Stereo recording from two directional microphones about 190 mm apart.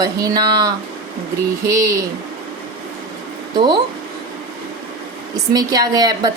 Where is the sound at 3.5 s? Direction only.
25° right (ahead or behind).